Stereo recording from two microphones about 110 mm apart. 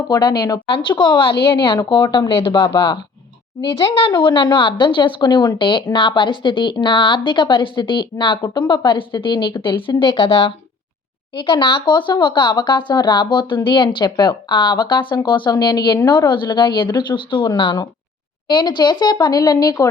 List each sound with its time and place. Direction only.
0.1 s speech: 40° left (ahead or behind)